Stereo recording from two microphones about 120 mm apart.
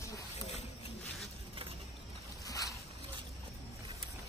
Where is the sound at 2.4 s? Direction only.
30° left (ahead or behind).